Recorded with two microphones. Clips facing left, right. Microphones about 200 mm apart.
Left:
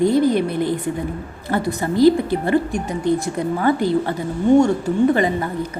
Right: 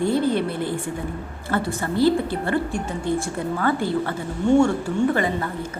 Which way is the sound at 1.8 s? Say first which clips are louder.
Left 6 dB; 15° left (ahead or behind).